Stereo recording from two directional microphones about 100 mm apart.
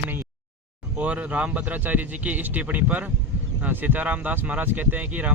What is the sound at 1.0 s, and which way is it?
Speech, 15° right (ahead or behind).